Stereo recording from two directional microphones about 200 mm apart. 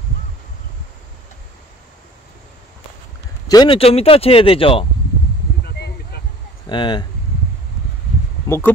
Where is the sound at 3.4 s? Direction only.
20° left (ahead or behind).